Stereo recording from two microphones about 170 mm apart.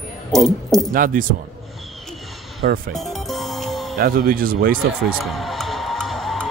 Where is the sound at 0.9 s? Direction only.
55° right (ahead or behind).